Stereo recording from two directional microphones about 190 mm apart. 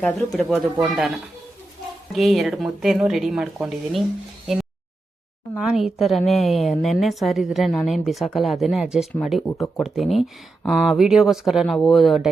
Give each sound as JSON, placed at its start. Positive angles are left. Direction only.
{"t": 0.0, "sound": "a woman's voice", "side_deg": 5}
{"t": 5.5, "sound": "a woman's voice", "side_deg": -5}